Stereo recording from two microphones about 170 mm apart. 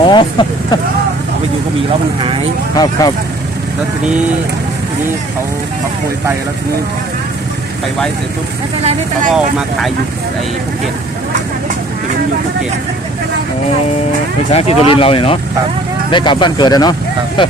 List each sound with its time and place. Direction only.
0.0 s speech: 30° left (ahead or behind)
2.7 s speech: 20° left (ahead or behind)
8.8 s speech: 40° right (ahead or behind)
14.5 s speech: 35° left (ahead or behind)